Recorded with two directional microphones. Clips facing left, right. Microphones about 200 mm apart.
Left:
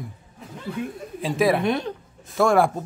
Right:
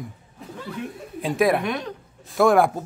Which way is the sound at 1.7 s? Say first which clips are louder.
Left 4 dB; 30° left (ahead or behind).